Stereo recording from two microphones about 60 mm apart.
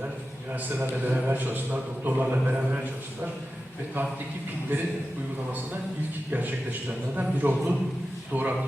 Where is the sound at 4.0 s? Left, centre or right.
Right.